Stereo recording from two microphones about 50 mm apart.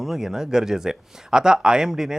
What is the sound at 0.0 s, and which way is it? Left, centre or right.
Speech, centre.